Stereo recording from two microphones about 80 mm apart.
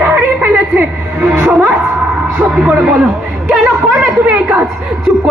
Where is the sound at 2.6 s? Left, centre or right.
Centre.